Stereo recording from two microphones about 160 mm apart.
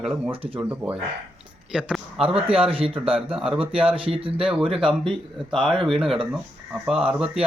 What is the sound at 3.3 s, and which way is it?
Speech, 5° right (ahead or behind).